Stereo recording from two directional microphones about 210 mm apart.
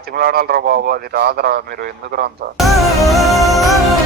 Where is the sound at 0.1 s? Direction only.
45° right (ahead or behind).